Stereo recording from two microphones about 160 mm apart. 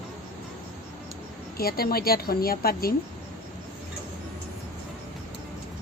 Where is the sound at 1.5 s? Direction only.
70° left (ahead or behind).